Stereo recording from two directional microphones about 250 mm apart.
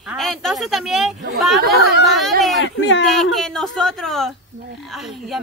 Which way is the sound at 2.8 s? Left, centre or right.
Left.